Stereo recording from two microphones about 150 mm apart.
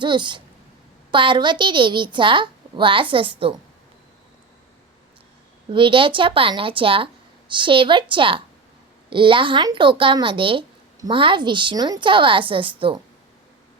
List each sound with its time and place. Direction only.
0.0 s speech: 30° right (ahead or behind)
5.7 s speech: 35° right (ahead or behind)